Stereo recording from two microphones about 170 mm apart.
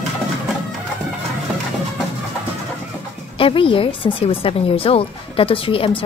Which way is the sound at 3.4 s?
30° left (ahead or behind).